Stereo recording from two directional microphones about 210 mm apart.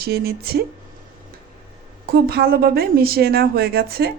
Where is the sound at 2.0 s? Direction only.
45° right (ahead or behind).